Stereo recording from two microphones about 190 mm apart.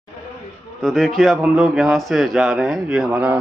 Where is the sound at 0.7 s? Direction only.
5° left (ahead or behind).